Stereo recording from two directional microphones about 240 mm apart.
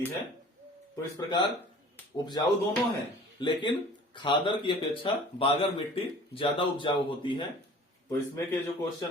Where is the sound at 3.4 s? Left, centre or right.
Centre.